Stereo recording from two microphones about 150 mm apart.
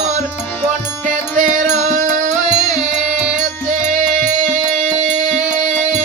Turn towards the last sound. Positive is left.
turn(degrees=-55)  # may be behind; listen again after turning